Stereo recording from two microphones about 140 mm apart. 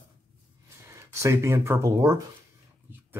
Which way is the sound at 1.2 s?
20° right (ahead or behind).